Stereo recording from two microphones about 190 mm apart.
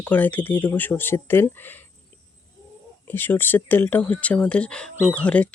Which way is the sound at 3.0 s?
10° left (ahead or behind).